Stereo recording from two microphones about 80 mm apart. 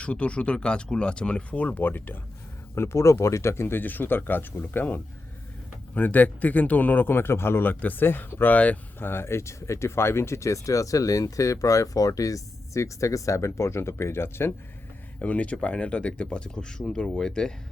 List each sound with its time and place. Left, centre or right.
0.0 s speech: centre; by 14.5 s left
15.2 s speech: centre